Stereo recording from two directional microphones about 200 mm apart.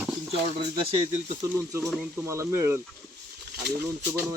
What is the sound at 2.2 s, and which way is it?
Speech, 15° right (ahead or behind).